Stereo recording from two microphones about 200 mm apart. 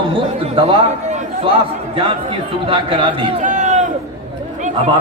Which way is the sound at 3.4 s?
40° right (ahead or behind).